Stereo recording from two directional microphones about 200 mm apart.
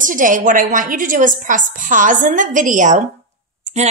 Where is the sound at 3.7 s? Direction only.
35° right (ahead or behind).